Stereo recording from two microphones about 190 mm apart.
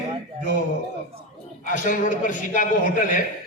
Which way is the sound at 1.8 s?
45° left (ahead or behind).